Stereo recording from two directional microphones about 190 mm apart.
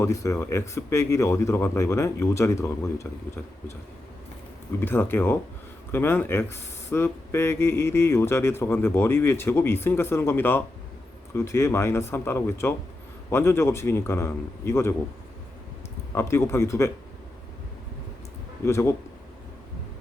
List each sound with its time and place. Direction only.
0.0 s speech: 15° left (ahead or behind)
4.8 s speech: 10° left (ahead or behind)
16.1 s speech: 15° left (ahead or behind)
18.6 s speech: 15° left (ahead or behind)